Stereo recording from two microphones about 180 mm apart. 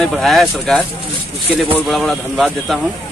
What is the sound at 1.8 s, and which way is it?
Speech, centre (ahead or behind).